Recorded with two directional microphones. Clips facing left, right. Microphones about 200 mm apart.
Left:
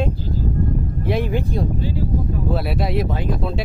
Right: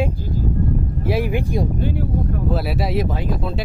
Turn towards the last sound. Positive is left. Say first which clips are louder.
# left 1 dB
turn(degrees=0)  # may be behind; listen again after turning